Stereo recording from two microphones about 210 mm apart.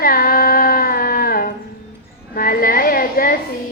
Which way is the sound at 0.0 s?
45° left (ahead or behind).